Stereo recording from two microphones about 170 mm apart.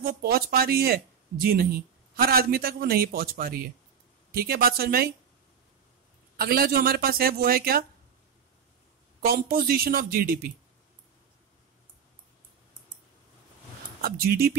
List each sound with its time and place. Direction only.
0.0 s speech: 60° right (ahead or behind)
6.3 s speech: 60° right (ahead or behind)
9.2 s speech: 60° right (ahead or behind)
14.0 s speech: 60° right (ahead or behind)